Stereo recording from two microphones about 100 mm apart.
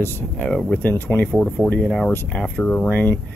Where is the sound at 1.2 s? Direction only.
5° left (ahead or behind).